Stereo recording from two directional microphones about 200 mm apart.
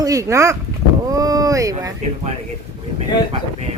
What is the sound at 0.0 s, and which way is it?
Speech, 15° right (ahead or behind).